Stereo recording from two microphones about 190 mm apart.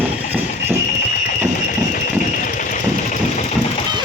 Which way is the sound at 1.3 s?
45° left (ahead or behind).